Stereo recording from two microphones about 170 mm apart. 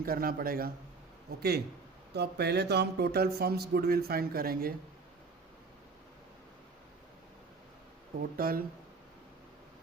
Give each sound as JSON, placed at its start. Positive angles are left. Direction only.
{"t": 0.0, "sound": "speech", "side_deg": -60}
{"t": 8.4, "sound": "speech", "side_deg": -60}